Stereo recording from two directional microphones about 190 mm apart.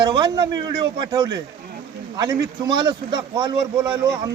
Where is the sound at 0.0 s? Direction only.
25° right (ahead or behind).